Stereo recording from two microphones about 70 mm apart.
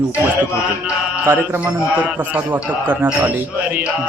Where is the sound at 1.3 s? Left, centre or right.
Right.